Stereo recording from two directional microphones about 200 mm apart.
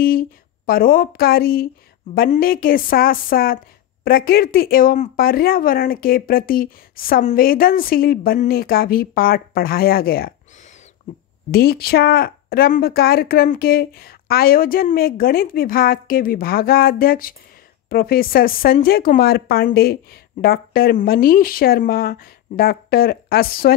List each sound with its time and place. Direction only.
0.0 s speech: 45° left (ahead or behind)
11.5 s speech: 50° left (ahead or behind)